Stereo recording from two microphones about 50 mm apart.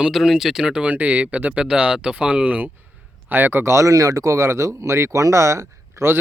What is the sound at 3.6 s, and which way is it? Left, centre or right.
Speech, right.